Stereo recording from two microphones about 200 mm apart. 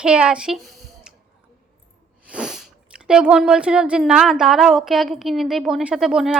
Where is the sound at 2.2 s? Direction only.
5° right (ahead or behind).